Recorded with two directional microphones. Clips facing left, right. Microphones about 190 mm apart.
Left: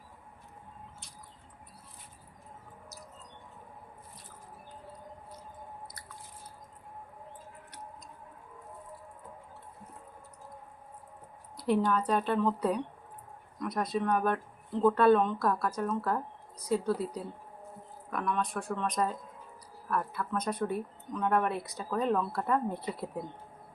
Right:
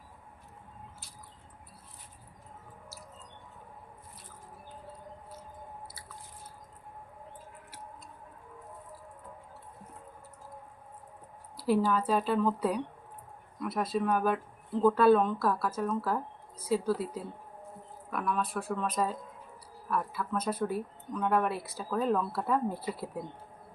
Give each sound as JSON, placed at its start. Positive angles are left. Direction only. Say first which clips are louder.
{"t": 11.5, "sound": "speech", "louder": "right 1 dB", "side_deg": -5}